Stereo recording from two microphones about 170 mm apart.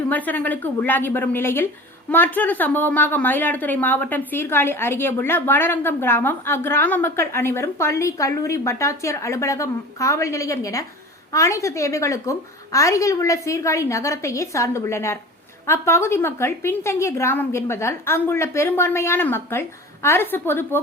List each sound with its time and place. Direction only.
0.1 s a woman's voice: 10° left (ahead or behind)